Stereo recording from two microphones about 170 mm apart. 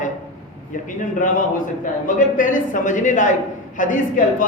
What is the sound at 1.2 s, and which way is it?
A woman's voice, 50° left (ahead or behind).